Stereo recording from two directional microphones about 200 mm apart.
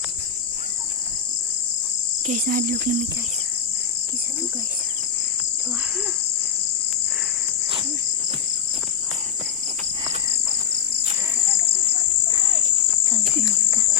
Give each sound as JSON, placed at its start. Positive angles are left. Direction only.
{"t": 2.2, "sound": "cricket", "side_deg": -40}